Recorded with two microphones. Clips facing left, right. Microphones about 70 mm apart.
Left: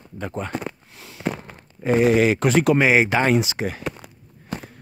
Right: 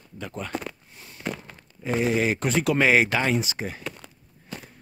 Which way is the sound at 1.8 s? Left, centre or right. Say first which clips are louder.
Left 7 dB; left.